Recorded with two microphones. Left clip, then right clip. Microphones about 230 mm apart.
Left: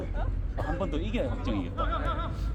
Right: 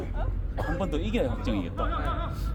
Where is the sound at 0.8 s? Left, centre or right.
Right.